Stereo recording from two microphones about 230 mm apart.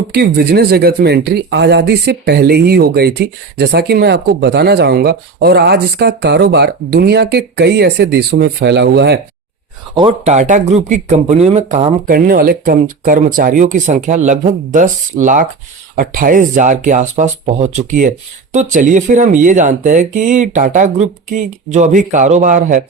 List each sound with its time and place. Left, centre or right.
0.1 s speech: right
9.9 s speech: right